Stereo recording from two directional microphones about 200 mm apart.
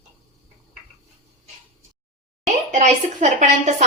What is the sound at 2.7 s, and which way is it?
Speech, 35° right (ahead or behind).